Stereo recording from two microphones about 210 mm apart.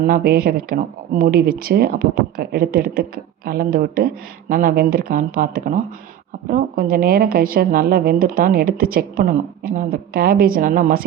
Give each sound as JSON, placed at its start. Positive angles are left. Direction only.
{"t": 0.0, "sound": "speech", "side_deg": -45}